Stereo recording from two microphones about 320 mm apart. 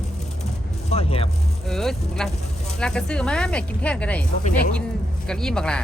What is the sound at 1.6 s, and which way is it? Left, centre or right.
Speech, centre.